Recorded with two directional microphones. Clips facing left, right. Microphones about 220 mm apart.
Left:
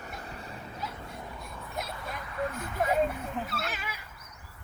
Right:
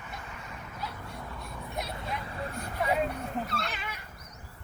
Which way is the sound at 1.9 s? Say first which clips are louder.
Left 1 dB; 30° right (ahead or behind).